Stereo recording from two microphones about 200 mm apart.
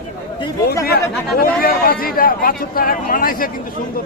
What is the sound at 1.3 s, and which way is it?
Speech, 50° left (ahead or behind).